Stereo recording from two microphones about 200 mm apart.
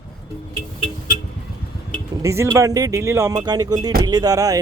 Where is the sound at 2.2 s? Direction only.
15° right (ahead or behind).